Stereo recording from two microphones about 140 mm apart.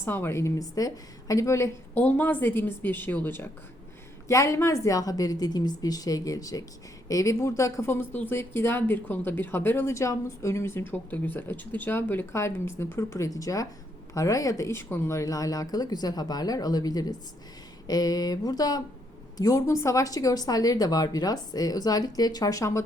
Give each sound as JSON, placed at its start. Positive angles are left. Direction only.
{"t": 0.0, "sound": "speech", "side_deg": 15}